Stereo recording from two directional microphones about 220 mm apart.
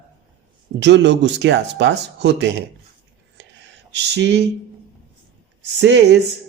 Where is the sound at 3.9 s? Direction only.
50° right (ahead or behind).